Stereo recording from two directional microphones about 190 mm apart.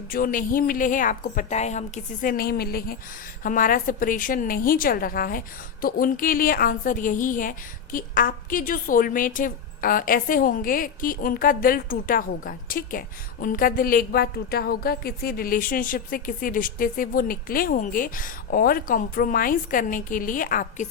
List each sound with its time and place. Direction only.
0.1 s a woman's voice: 45° left (ahead or behind)
2.2 s a woman's voice: 50° left (ahead or behind)